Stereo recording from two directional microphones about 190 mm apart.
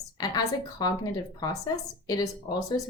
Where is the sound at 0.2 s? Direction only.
20° left (ahead or behind).